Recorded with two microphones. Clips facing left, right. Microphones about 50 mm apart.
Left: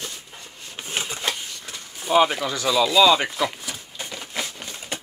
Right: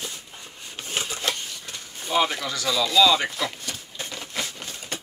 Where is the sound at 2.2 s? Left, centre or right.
Centre.